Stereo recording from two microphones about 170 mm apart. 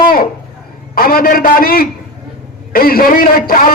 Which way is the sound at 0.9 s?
60° left (ahead or behind).